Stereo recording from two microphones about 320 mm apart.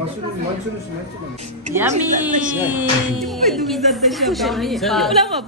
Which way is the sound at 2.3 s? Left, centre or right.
Right.